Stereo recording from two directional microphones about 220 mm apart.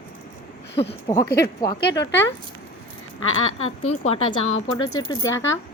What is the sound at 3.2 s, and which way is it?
Speech, 70° left (ahead or behind).